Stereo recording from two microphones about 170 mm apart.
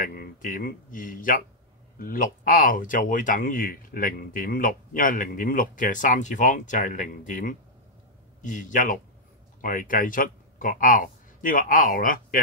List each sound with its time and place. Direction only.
0.0 s a man's voice: 60° left (ahead or behind)